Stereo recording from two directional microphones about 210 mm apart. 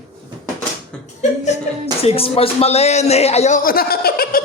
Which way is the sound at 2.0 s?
25° left (ahead or behind).